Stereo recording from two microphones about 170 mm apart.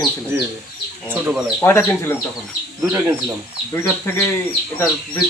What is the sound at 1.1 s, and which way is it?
Speech, 10° right (ahead or behind).